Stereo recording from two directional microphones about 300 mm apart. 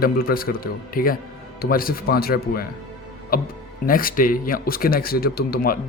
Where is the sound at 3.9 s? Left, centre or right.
Left.